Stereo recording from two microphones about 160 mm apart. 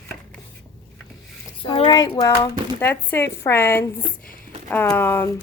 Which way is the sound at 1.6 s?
30° left (ahead or behind).